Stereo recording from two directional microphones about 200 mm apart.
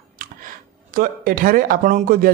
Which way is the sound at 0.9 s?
45° right (ahead or behind).